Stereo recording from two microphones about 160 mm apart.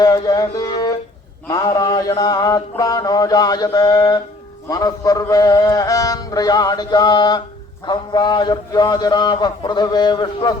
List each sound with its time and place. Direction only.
0.0 s music: 25° left (ahead or behind)
1.5 s mantra: 25° left (ahead or behind)